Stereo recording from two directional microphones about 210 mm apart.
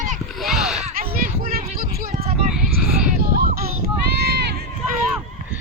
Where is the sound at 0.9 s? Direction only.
45° right (ahead or behind).